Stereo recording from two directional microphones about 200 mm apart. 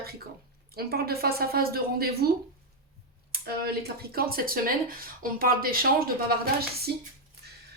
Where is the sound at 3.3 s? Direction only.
50° right (ahead or behind).